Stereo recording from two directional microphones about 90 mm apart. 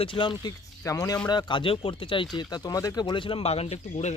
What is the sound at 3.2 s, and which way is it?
Speech, 80° left.